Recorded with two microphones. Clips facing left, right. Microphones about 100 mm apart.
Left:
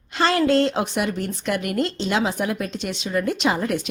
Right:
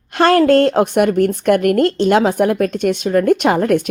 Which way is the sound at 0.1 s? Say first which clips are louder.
Right 8 dB; 55° right (ahead or behind).